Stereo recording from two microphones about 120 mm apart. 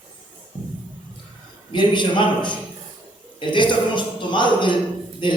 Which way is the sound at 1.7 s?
40° left (ahead or behind).